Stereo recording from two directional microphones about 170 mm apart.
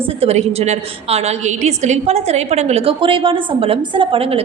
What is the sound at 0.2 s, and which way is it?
A woman's voice, 35° right (ahead or behind).